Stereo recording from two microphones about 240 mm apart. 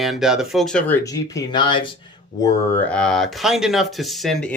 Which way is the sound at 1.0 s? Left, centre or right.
Centre.